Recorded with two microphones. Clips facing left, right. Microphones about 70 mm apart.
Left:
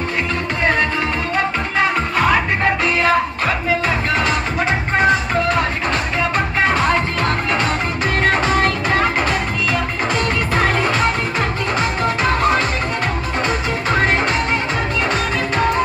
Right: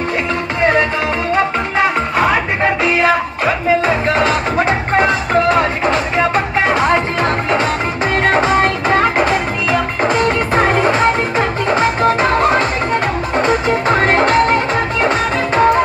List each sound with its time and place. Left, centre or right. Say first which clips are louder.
2.8 s music: right 2 dB; right
5.9 s music: right 5 dB; right